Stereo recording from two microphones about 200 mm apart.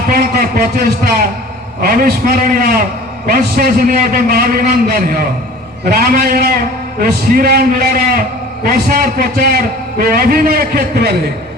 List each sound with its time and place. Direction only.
0.1 s a man's voice: 45° right (ahead or behind)